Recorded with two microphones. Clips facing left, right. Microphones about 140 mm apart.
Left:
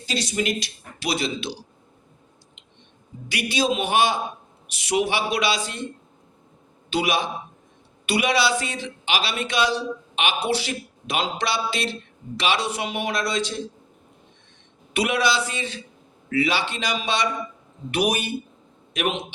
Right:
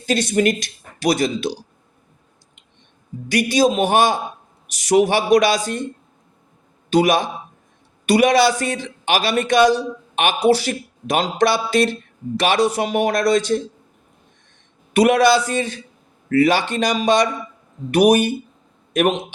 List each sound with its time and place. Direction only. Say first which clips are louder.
0.0 s a man's voice: right 8 dB; 55° right (ahead or behind)
3.2 s a man's voice: right 7 dB; 45° right (ahead or behind)
6.9 s a man's voice: right 7 dB; 45° right (ahead or behind)
14.9 s a man's voice: right 9 dB; 45° right (ahead or behind)